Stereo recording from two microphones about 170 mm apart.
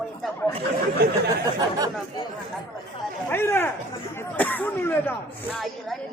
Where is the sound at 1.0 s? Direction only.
65° right (ahead or behind).